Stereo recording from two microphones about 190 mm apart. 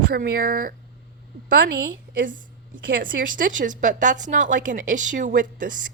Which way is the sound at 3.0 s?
45° right (ahead or behind).